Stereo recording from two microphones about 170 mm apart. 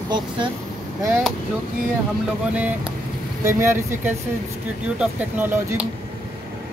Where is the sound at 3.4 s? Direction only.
15° right (ahead or behind).